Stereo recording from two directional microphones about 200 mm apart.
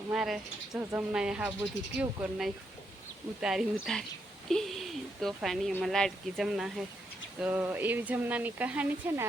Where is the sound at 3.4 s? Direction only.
Centre (ahead or behind).